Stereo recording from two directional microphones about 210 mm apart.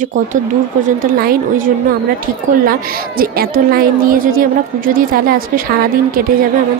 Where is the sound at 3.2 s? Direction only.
45° right (ahead or behind).